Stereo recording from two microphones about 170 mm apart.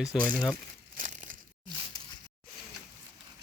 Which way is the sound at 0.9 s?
50° right (ahead or behind).